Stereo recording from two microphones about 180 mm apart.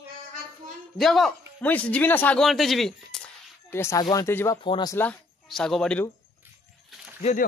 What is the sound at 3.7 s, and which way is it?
Speech, 15° left (ahead or behind).